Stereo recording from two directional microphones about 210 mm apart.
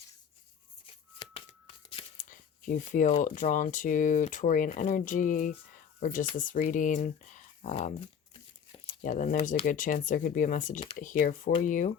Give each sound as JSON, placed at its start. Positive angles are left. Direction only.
{"t": 1.2, "sound": "tearing", "side_deg": 25}
{"t": 2.1, "sound": "speech", "side_deg": 40}
{"t": 8.9, "sound": "speech", "side_deg": 40}